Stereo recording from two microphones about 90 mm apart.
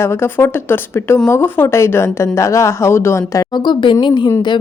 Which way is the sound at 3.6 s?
65° left (ahead or behind).